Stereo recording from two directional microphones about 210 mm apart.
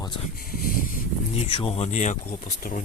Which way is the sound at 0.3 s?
45° left (ahead or behind).